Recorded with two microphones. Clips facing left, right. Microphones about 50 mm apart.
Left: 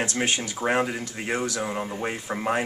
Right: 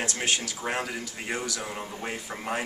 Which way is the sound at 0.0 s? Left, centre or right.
Left.